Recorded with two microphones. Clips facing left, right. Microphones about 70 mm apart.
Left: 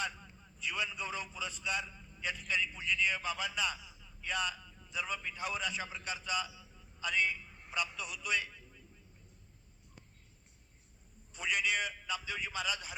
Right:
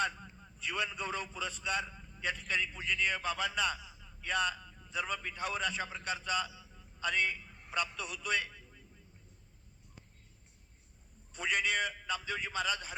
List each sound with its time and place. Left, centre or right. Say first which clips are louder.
0.0 s a man's voice: right 5 dB; right
11.3 s a man's voice: right 1 dB; right